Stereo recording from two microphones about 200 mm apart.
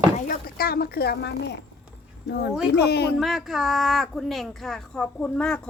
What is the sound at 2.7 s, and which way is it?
Speech, 55° left (ahead or behind).